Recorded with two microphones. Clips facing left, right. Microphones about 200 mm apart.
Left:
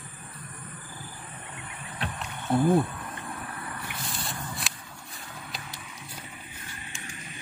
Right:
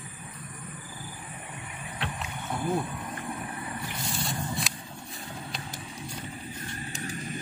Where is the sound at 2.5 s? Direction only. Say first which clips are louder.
Left 11 dB; 30° left (ahead or behind).